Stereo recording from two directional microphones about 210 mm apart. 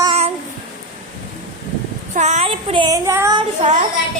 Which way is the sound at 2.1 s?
35° right (ahead or behind).